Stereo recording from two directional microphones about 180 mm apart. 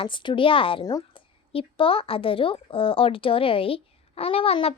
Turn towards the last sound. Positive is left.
turn(degrees=30)  # may be behind; listen again after turning